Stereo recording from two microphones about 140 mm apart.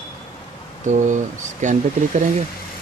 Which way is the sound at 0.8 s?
65° right (ahead or behind).